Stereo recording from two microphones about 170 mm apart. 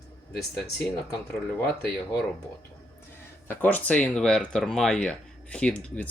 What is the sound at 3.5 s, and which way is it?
Speech, 10° left (ahead or behind).